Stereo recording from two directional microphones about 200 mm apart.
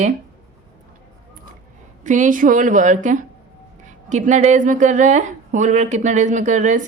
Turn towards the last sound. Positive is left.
turn(degrees=-40)  # may be behind; listen again after turning